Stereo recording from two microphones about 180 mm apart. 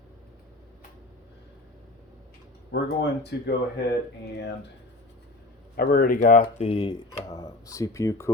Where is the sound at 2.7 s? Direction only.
70° left (ahead or behind).